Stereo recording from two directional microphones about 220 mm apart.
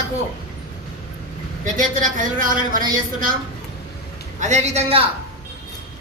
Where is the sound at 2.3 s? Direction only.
40° right (ahead or behind).